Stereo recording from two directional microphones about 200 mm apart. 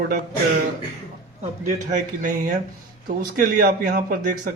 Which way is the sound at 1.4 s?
35° right (ahead or behind).